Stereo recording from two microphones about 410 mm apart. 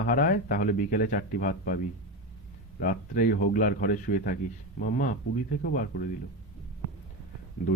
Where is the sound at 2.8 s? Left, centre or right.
Left.